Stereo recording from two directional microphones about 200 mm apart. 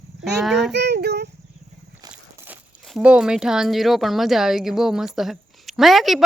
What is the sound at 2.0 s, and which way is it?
Walk, 15° right (ahead or behind).